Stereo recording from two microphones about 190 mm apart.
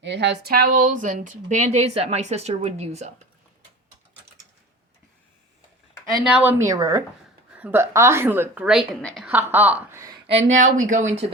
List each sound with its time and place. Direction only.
0.0 s speech: 65° right (ahead or behind); by 3.1 s 35° right (ahead or behind)
6.2 s a woman's voice: 5° right (ahead or behind)
9.5 s a woman's voice: 10° right (ahead or behind)
10.2 s speech: 35° right (ahead or behind)